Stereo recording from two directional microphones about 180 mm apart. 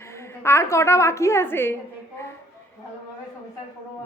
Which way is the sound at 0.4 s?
15° left (ahead or behind).